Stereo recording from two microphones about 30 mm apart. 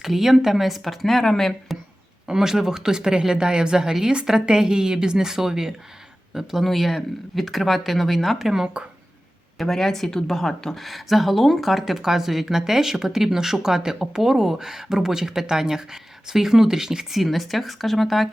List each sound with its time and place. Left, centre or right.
0.0 s speech: centre
1.2 s speech: centre
2.2 s speech: centre
6.6 s speech: centre
8.4 s speech: centre
9.6 s speech: centre
10.8 s speech: centre; by 14.2 s right
14.2 s speech: centre
17.2 s speech: centre